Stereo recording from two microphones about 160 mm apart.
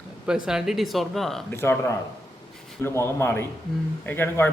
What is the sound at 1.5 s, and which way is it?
A man's voice, 15° left (ahead or behind).